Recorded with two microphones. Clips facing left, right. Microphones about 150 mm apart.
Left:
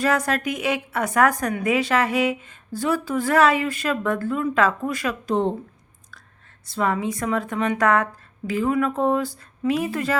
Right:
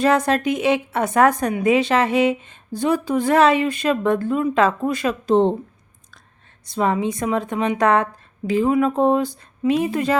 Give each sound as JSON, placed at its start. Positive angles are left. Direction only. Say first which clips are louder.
{"t": 0.0, "sound": "speech", "louder": "right 4 dB", "side_deg": -25}
{"t": 6.7, "sound": "speech", "louder": "right 3 dB", "side_deg": -20}